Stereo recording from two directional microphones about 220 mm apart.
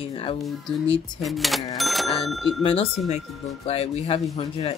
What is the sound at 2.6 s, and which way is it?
Speech, 25° left (ahead or behind).